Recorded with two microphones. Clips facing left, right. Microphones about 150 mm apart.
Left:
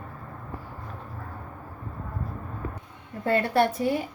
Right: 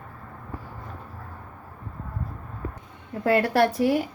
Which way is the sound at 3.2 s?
80° right.